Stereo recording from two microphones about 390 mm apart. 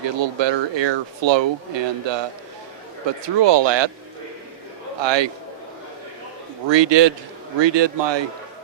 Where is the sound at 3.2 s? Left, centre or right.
Right.